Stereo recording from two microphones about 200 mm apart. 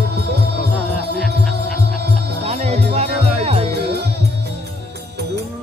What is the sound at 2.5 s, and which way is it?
Music, 30° right (ahead or behind).